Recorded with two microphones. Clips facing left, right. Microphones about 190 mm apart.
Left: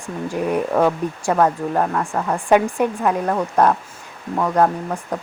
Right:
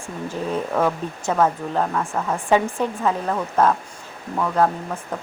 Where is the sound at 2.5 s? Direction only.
15° left (ahead or behind).